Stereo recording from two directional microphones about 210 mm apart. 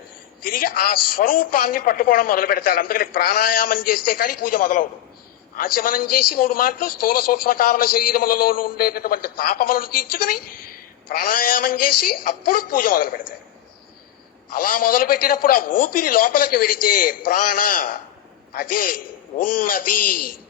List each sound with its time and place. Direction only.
0.4 s a man's voice: 45° left (ahead or behind)
14.5 s a man's voice: 40° left (ahead or behind)
19.4 s a sound: 40° left (ahead or behind)